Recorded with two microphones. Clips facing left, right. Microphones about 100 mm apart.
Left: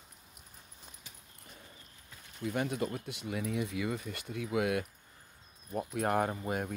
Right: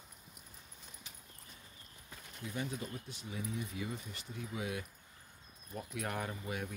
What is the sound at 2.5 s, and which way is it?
Speech, 65° left (ahead or behind).